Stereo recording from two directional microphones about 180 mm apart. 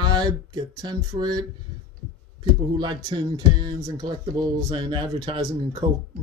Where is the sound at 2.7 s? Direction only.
25° right (ahead or behind).